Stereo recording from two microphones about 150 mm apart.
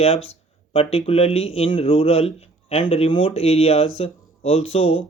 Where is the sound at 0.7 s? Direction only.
40° left (ahead or behind).